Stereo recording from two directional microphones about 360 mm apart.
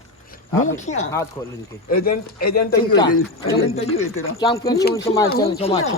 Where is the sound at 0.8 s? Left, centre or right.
Centre.